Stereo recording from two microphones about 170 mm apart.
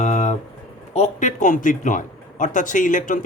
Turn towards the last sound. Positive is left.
turn(degrees=50)  # may be behind; listen again after turning